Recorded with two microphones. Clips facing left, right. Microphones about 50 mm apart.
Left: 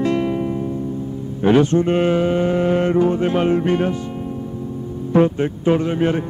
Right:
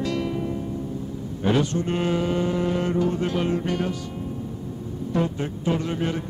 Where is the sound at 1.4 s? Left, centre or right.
Left.